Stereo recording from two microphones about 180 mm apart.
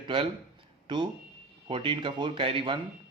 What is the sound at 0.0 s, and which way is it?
A man's voice, 30° right (ahead or behind).